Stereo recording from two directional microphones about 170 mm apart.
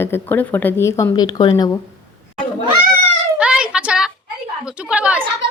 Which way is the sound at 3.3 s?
5° right (ahead or behind).